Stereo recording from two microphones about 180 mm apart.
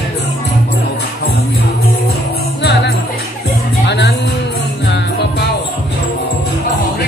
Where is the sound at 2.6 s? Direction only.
70° left (ahead or behind).